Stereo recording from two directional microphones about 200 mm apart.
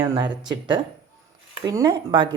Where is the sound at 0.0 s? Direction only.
20° right (ahead or behind).